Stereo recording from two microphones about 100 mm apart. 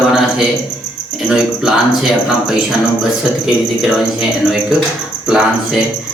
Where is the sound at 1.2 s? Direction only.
5° right (ahead or behind).